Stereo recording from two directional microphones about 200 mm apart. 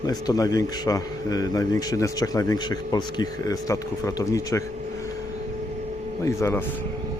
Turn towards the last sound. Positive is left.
turn(degrees=15)  # may be behind; listen again after turning